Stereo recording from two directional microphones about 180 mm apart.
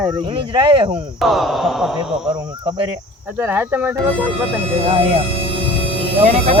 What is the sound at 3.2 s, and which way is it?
Speech, 10° right (ahead or behind).